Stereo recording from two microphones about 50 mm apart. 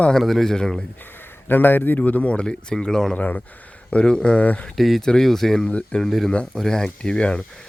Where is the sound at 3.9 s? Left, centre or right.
Centre.